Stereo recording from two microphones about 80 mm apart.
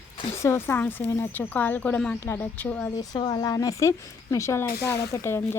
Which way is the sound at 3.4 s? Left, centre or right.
Left.